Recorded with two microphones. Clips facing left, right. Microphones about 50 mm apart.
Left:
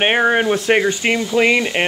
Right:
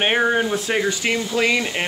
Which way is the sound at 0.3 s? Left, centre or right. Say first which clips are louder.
Left 5 dB; left.